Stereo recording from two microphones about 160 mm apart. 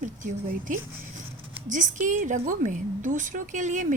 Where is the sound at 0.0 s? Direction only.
50° right (ahead or behind).